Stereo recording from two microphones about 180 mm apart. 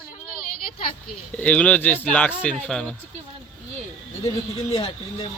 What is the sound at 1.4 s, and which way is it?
Speech, 5° left (ahead or behind).